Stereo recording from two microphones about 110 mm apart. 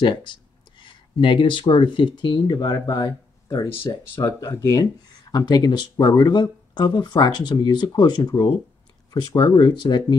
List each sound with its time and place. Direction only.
0.0 s speech: 45° left (ahead or behind)
4.1 s speech: 30° left (ahead or behind)